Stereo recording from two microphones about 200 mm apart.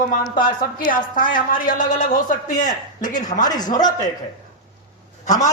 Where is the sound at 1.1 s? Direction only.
40° left (ahead or behind).